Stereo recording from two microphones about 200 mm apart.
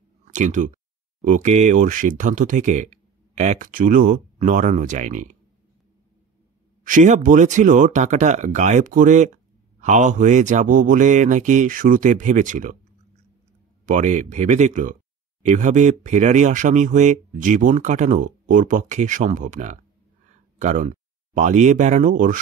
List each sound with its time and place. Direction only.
0.2 s speech: 35° right (ahead or behind)
6.9 s speech: 40° right (ahead or behind)
13.8 s speech: 40° right (ahead or behind)